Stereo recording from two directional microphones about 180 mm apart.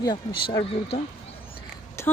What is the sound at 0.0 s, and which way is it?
Speech, 25° left (ahead or behind).